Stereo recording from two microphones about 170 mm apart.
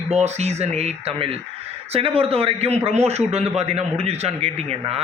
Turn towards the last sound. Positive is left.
turn(degrees=-35)  # may be behind; listen again after turning